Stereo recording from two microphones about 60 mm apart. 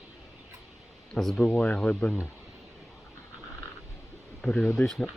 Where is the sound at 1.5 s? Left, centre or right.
Left.